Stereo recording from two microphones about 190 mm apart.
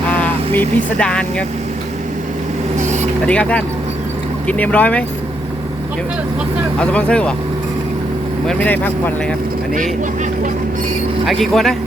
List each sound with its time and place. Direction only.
0.1 s speech: 10° left (ahead or behind)
2.7 s vehicle: 40° right (ahead or behind)
3.2 s speech: 5° left (ahead or behind)
6.7 s speech: 5° left (ahead or behind)
8.4 s speech: 10° left (ahead or behind)
11.3 s speech: centre (ahead or behind)